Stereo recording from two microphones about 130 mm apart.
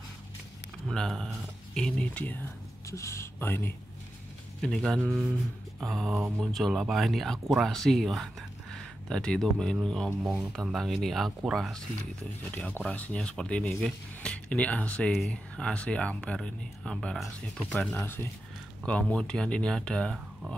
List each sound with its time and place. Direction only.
0.8 s speech: centre (ahead or behind)
2.9 s speech: 20° left (ahead or behind)
4.6 s speech: 5° left (ahead or behind)
12.4 s speech: 15° left (ahead or behind)